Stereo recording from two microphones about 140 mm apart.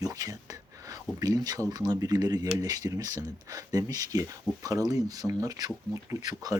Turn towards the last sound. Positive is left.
turn(degrees=-25)  # may be behind; listen again after turning